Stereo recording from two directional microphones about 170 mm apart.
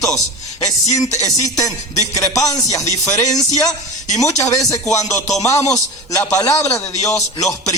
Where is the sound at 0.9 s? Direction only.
20° left (ahead or behind).